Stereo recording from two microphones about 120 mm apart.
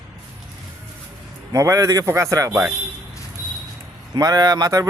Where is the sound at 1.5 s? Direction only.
30° right (ahead or behind).